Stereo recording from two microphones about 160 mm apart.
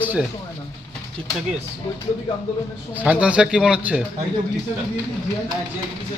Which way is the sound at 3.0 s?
5° right (ahead or behind).